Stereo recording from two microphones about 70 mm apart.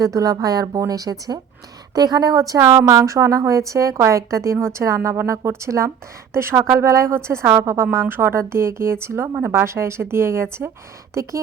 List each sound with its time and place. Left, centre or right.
0.0 s a woman's voice: right
7.9 s speech: right
11.1 s speech: right